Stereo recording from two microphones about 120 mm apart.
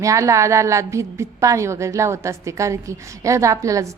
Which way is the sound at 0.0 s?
25° right (ahead or behind).